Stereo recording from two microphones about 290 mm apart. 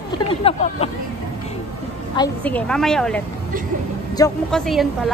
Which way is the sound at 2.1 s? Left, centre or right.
Centre.